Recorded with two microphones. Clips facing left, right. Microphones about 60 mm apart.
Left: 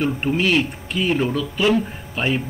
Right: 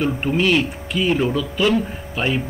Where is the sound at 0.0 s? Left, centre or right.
Centre.